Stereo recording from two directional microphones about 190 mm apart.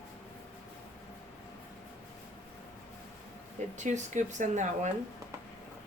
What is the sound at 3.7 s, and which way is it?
Speech, 40° right (ahead or behind).